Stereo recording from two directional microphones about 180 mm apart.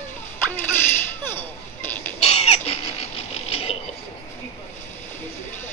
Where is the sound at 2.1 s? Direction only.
35° left (ahead or behind).